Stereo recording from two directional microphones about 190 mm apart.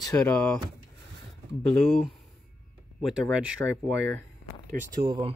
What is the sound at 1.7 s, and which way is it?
Speech, centre (ahead or behind).